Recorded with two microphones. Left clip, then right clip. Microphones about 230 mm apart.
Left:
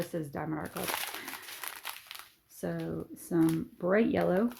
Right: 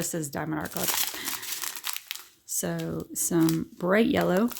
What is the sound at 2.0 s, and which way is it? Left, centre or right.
Speech, right.